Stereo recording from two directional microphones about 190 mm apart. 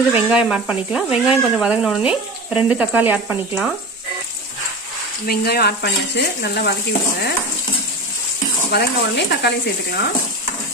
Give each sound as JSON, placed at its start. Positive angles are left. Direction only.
{"t": 0.1, "sound": "speech", "side_deg": -5}
{"t": 5.2, "sound": "frying", "side_deg": 55}
{"t": 8.6, "sound": "frying", "side_deg": 60}